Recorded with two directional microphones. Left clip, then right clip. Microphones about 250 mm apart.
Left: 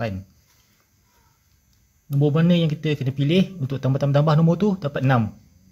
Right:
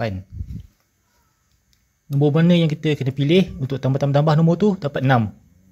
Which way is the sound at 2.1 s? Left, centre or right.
Centre.